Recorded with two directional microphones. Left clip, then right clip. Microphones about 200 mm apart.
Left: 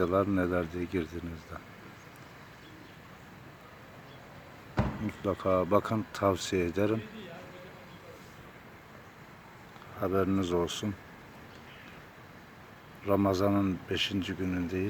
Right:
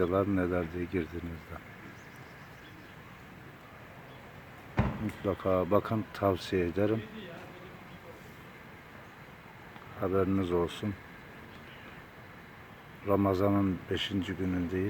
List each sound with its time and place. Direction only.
0.0 s speech: 10° left (ahead or behind)
4.8 s a sound: 50° left (ahead or behind)
5.2 s speech: 10° left (ahead or behind)
10.0 s speech: 10° left (ahead or behind)
13.1 s speech: 10° left (ahead or behind)